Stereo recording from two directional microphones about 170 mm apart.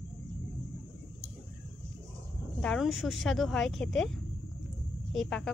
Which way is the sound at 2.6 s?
Centre (ahead or behind).